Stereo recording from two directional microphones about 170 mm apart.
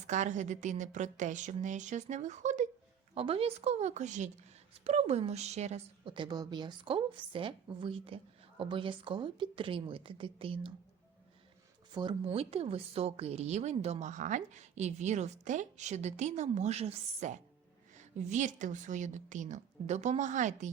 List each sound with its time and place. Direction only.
0.1 s a woman's voice: 45° right (ahead or behind)
11.9 s a woman's voice: 30° right (ahead or behind)